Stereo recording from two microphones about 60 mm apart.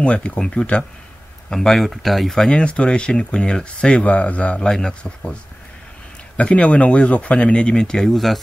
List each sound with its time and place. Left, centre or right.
0.0 s speech: left; by 2.5 s centre
2.5 s speech: centre